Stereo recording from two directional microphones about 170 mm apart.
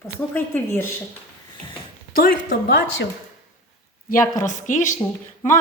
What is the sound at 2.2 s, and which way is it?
Speech, 55° left (ahead or behind).